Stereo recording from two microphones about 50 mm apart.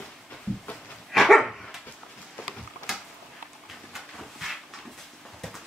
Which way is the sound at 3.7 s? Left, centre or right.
Centre.